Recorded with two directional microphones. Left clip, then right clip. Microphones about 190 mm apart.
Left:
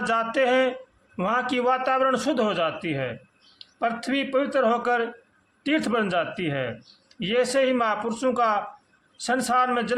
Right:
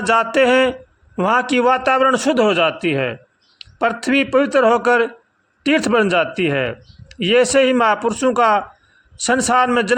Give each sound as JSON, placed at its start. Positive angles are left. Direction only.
{"t": 0.0, "sound": "speech", "side_deg": -35}